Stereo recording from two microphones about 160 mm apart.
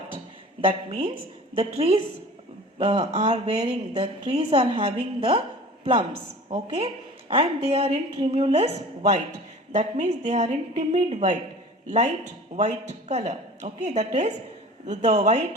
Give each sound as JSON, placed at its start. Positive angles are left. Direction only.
{"t": 0.6, "sound": "a woman's voice", "side_deg": -35}